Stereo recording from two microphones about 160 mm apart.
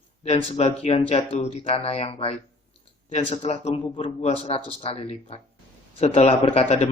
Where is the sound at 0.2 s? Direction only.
40° left (ahead or behind).